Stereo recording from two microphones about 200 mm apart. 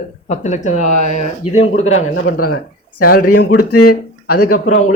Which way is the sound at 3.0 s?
45° left (ahead or behind).